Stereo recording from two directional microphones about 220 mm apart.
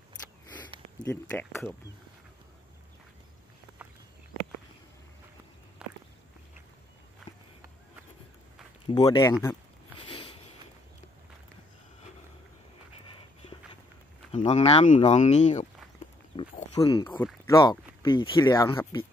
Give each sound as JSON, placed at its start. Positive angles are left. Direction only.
{"t": 1.0, "sound": "speech", "side_deg": 10}
{"t": 5.8, "sound": "walk", "side_deg": -5}
{"t": 8.8, "sound": "speech", "side_deg": 20}
{"t": 9.9, "sound": "a sound", "side_deg": 20}
{"t": 14.3, "sound": "speech", "side_deg": 30}
{"t": 17.6, "sound": "speech", "side_deg": 20}